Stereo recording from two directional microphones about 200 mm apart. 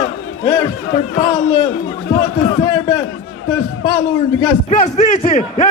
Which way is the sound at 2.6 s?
20° left (ahead or behind).